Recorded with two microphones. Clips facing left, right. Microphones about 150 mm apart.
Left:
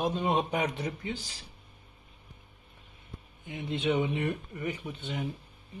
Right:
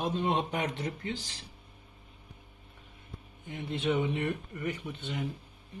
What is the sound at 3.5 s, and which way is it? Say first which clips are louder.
Speech: left 1 dB; 15° left (ahead or behind).